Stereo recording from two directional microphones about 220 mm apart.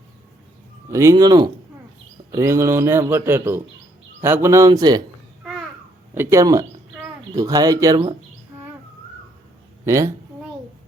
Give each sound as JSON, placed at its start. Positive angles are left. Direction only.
{"t": 0.9, "sound": "speech", "side_deg": -15}
{"t": 5.4, "sound": "babbling", "side_deg": 0}
{"t": 6.1, "sound": "speech", "side_deg": -15}
{"t": 9.8, "sound": "a sound", "side_deg": -15}